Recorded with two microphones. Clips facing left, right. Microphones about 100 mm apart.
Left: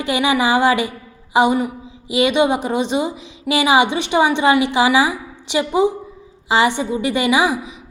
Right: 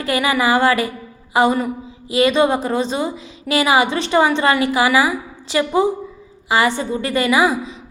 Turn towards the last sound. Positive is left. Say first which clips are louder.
# right 1 dB
turn(degrees=20)  # may be behind; listen again after turning